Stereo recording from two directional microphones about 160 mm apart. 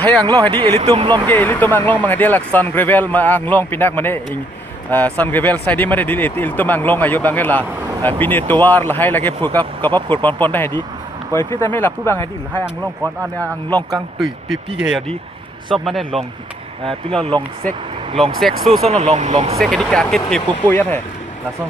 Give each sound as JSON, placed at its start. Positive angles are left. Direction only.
{"t": 0.2, "sound": "speech", "side_deg": -25}
{"t": 1.3, "sound": "speech", "side_deg": 10}
{"t": 12.6, "sound": "speech", "side_deg": -10}
{"t": 13.7, "sound": "speech", "side_deg": -25}
{"t": 14.2, "sound": "speech", "side_deg": 0}
{"t": 18.2, "sound": "speech", "side_deg": 0}
{"t": 18.8, "sound": "speech", "side_deg": -40}
{"t": 19.5, "sound": "speech", "side_deg": 0}